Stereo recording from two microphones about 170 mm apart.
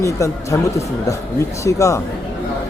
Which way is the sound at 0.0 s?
20° left (ahead or behind).